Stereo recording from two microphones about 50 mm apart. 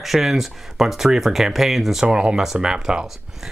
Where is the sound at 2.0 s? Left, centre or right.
Right.